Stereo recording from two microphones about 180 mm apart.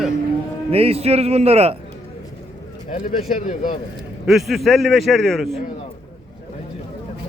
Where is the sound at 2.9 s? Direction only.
50° left (ahead or behind).